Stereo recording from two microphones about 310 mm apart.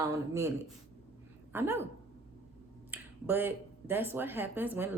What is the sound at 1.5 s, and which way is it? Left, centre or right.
Speech, centre.